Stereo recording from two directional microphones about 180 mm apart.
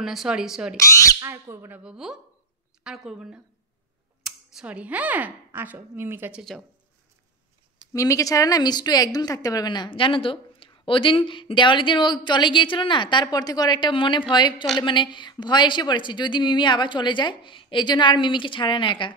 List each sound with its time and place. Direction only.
0.0 s speech: centre (ahead or behind)
0.7 s speech: 15° left (ahead or behind)
1.2 s speech: 15° right (ahead or behind)
7.9 s speech: 20° left (ahead or behind)